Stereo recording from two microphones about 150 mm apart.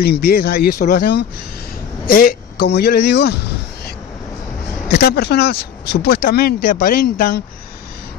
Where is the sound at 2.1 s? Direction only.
80° left.